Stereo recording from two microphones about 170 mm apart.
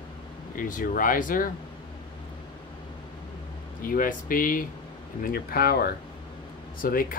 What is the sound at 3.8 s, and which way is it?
Speech, 55° left (ahead or behind).